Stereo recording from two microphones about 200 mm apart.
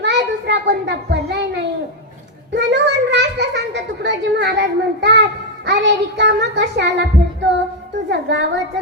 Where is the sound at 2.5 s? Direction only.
60° right (ahead or behind).